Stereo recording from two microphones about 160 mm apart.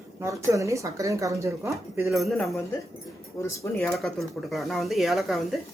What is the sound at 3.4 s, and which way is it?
Speech, 15° left (ahead or behind).